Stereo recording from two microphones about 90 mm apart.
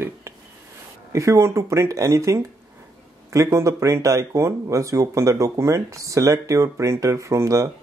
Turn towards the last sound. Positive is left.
turn(degrees=-35)  # may be behind; listen again after turning